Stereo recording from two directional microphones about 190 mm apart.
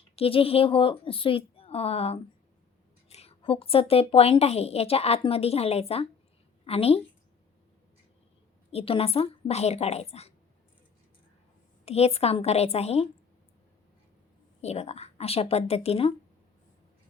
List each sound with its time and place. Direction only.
0.2 s a woman's voice: 30° left (ahead or behind)
8.7 s a woman's voice: 30° left (ahead or behind)
11.9 s a woman's voice: 35° left (ahead or behind)
14.6 s a woman's voice: 35° left (ahead or behind)